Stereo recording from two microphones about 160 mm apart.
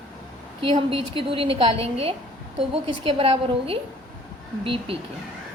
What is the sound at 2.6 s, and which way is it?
A woman's voice, 35° right (ahead or behind).